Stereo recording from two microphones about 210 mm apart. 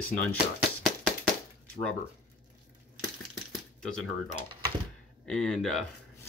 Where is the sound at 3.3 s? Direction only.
5° left (ahead or behind).